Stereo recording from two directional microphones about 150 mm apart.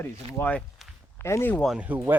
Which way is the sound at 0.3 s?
10° left (ahead or behind).